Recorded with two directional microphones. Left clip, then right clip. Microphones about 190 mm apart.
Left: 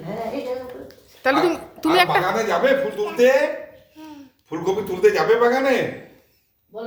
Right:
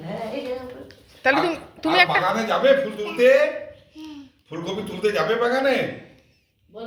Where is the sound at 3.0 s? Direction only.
40° left (ahead or behind).